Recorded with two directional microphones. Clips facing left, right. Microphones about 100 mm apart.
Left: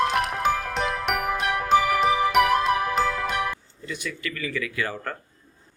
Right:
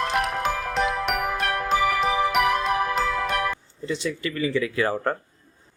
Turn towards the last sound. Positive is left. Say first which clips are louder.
# right 6 dB
turn(degrees=-30)  # may be behind; listen again after turning